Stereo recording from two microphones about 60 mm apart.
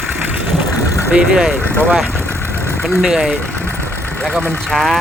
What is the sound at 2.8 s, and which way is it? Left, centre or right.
Speech, centre.